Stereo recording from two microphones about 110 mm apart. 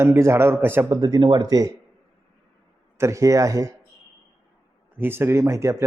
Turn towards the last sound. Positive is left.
turn(degrees=-25)  # may be behind; listen again after turning